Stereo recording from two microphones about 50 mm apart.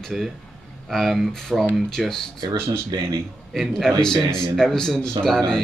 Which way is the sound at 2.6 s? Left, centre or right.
Right.